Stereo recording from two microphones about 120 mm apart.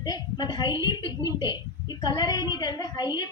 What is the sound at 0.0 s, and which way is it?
A woman's voice, 35° left (ahead or behind).